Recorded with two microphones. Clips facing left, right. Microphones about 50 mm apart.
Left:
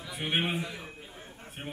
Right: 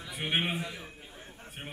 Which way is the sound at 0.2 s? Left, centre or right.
Centre.